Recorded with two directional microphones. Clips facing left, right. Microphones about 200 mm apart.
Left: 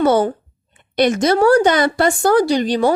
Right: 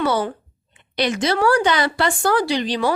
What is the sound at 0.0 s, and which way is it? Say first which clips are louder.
A woman's voice: left 6 dB; 50° left (ahead or behind).